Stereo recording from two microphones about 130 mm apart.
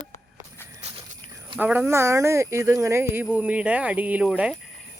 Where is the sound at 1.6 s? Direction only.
15° right (ahead or behind).